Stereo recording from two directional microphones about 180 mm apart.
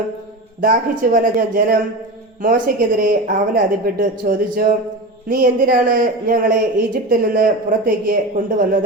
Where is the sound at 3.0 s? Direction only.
50° right (ahead or behind).